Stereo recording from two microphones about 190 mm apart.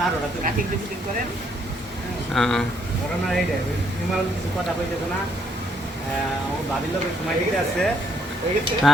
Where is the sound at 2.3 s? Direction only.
Centre (ahead or behind).